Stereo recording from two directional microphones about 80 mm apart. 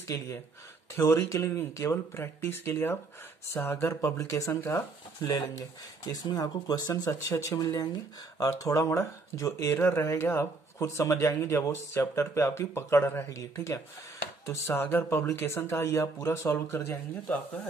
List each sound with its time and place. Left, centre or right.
0.0 s speech: left
4.6 s speech: left
5.2 s speech: left
9.8 s speech: left